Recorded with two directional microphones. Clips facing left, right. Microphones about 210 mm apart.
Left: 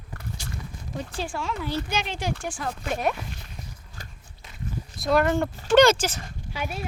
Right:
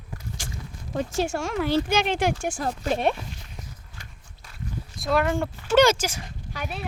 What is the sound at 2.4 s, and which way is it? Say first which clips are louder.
Speech: right 4 dB; 40° right (ahead or behind).